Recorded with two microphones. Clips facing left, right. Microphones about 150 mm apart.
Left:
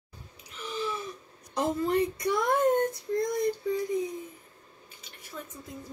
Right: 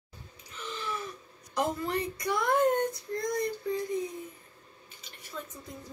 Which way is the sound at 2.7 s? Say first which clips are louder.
Left 4 dB; 20° left (ahead or behind).